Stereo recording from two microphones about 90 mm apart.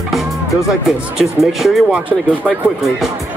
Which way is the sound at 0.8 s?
5° right (ahead or behind).